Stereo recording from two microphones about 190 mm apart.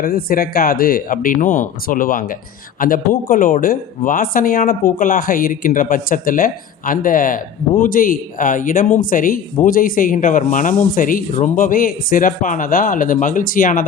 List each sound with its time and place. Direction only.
0.0 s speech: 50° left (ahead or behind)